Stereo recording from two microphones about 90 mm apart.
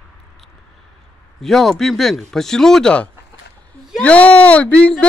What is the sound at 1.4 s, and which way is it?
Speech, 5° left (ahead or behind).